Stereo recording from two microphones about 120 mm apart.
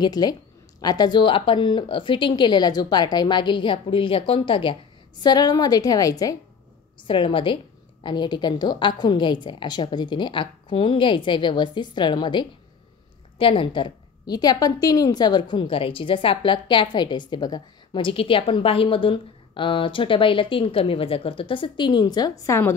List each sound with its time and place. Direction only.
0.0 s speech: 35° left (ahead or behind)
5.2 s speech: 35° left (ahead or behind)
7.0 s a woman's voice: 45° left (ahead or behind); by 22.8 s 25° left (ahead or behind)